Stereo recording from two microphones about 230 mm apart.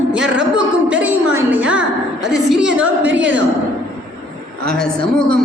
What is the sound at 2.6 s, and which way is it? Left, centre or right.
Speech, right.